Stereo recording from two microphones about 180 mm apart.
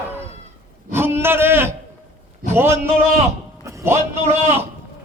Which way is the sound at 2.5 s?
15° right (ahead or behind).